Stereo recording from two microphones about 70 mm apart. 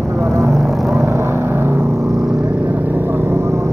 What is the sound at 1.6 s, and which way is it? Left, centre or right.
Vehicle, right.